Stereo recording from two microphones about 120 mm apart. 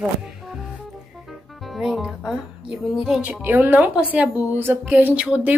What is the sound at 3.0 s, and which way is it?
Speech, 10° right (ahead or behind).